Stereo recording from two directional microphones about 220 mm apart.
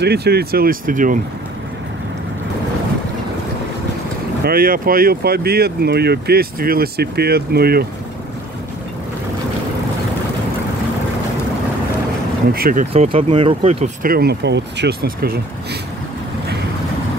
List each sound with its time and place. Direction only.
0.0 s speech: 45° right (ahead or behind)
4.5 s speech: 40° right (ahead or behind)
12.5 s speech: 40° right (ahead or behind)
12.9 s speech: 25° right (ahead or behind)
14.0 s speech: 45° right (ahead or behind)